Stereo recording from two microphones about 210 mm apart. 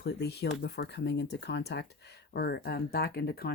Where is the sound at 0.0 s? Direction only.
50° left (ahead or behind).